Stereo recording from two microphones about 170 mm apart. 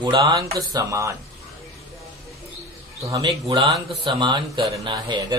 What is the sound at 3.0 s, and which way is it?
Speech, 20° right (ahead or behind).